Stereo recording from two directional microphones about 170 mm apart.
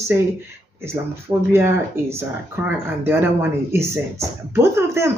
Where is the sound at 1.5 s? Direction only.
15° right (ahead or behind).